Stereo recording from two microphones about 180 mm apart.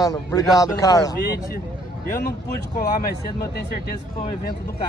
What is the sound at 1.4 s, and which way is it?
Speech, 55° left (ahead or behind).